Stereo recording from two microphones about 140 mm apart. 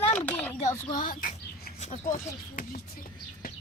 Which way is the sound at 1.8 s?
65° left (ahead or behind).